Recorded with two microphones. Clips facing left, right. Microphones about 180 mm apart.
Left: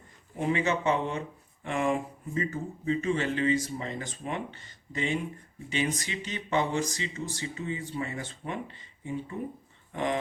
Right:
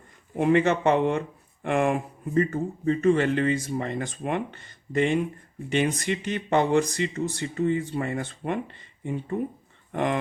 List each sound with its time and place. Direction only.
0.3 s speech: 65° right (ahead or behind)
9.9 s speech: 55° right (ahead or behind)